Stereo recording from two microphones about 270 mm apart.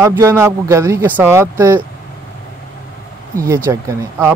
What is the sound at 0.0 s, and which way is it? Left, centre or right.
Speech, centre.